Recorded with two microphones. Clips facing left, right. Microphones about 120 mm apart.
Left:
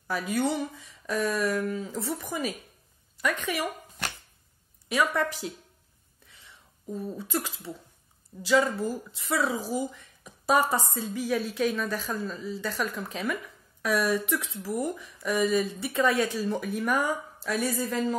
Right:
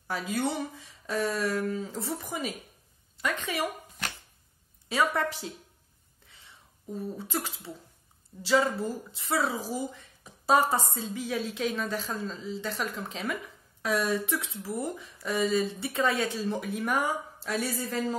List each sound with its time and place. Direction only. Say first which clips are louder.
0.1 s speech: left 3 dB; 25° right (ahead or behind)
4.8 s speech: left 1 dB; 30° right (ahead or behind)
7.2 s speech: left 2 dB; 25° right (ahead or behind)
9.9 s a sound: left 1 dB; 30° right (ahead or behind)
10.7 s a woman's voice: left 1 dB; 25° right (ahead or behind)